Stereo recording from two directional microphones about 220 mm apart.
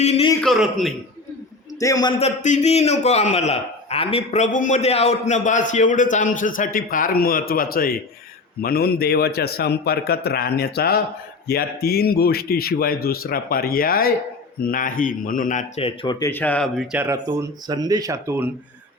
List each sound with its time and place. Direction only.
0.0 s a sound: 30° left (ahead or behind)
0.4 s a man's voice: centre (ahead or behind)
1.8 s a man's voice: 15° left (ahead or behind)
16.3 s speech: 5° left (ahead or behind); by 18.5 s 10° right (ahead or behind)